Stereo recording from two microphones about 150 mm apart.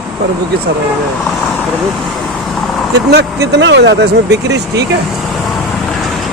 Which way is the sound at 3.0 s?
90° right.